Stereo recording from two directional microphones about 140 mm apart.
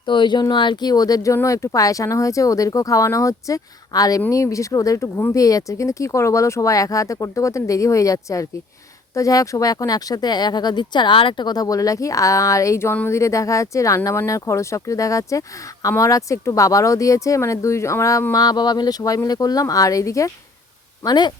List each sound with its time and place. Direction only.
0.0 s speech: 35° left (ahead or behind)